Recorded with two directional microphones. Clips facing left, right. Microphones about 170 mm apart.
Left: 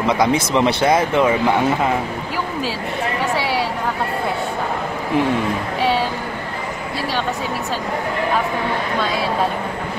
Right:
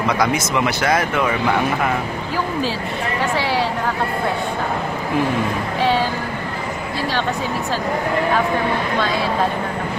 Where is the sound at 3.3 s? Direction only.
5° left (ahead or behind).